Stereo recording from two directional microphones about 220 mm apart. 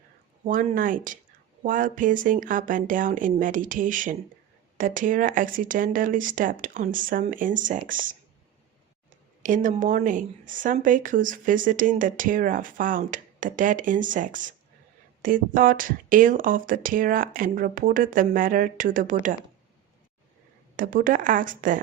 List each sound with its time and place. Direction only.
0.4 s speech: 35° right (ahead or behind)
9.4 s speech: 35° right (ahead or behind)
20.7 s speech: 40° right (ahead or behind)